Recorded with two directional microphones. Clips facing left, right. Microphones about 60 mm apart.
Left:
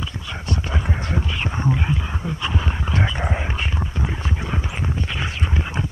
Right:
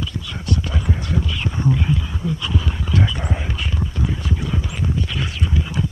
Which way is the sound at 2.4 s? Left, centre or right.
Left.